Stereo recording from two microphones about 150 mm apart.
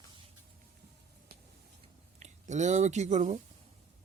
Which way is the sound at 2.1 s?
50° right (ahead or behind).